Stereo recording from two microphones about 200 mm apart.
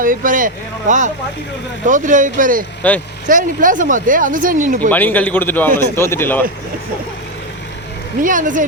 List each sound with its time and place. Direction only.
0.0 s speech: 45° right (ahead or behind)
4.9 s a man's voice: 10° left (ahead or behind)
8.2 s speech: 40° right (ahead or behind)